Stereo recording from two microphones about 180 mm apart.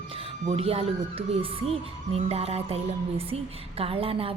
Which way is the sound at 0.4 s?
35° right (ahead or behind).